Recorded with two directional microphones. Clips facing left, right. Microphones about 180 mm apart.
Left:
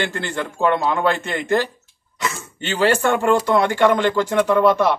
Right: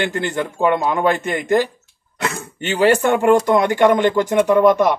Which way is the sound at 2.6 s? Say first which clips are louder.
Right 3 dB; 15° right (ahead or behind).